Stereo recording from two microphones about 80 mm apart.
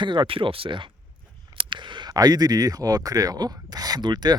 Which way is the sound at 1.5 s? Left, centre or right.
Right.